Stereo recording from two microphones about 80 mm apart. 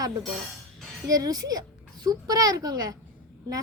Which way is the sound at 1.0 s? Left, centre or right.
Right.